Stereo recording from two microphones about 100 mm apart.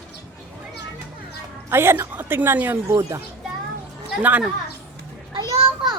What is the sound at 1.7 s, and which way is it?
A woman's voice, 25° right (ahead or behind).